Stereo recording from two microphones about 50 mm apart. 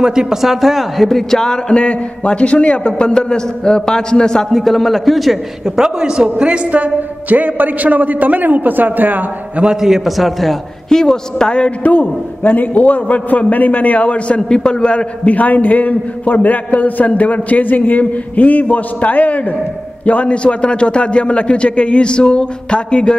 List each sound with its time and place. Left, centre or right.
0.0 s a man's voice: centre
1.8 s a man's voice: left; by 5.4 s centre
5.8 s a man's voice: centre; by 9.2 s right
9.8 s a man's voice: centre
11.8 s a man's voice: left; by 15.3 s centre
15.3 s a man's voice: left